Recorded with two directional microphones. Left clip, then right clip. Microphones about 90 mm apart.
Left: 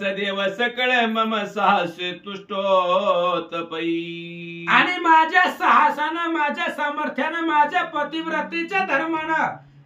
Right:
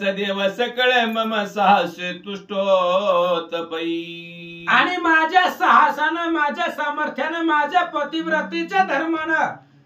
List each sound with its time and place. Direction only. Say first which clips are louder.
0.0 s a man's voice: right 2 dB; 30° right (ahead or behind)
4.6 s speech: even; 20° left (ahead or behind)